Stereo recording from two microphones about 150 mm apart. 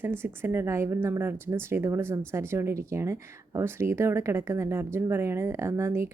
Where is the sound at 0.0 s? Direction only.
15° right (ahead or behind).